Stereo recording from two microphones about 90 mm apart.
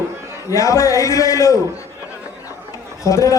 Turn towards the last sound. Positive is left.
turn(degrees=40)  # may be behind; listen again after turning